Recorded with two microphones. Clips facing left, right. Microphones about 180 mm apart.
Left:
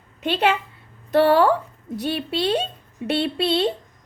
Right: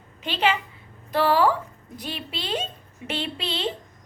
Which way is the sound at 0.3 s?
55° left (ahead or behind).